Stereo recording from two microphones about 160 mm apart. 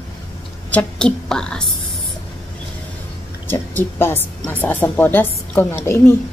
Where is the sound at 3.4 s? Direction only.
15° left (ahead or behind).